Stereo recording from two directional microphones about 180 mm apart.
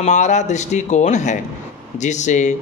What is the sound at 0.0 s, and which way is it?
A man's voice, 40° left (ahead or behind).